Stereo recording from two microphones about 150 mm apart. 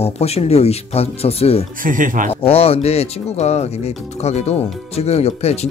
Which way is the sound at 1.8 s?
65° right (ahead or behind).